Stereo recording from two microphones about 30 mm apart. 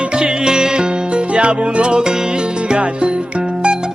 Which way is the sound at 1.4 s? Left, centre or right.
Right.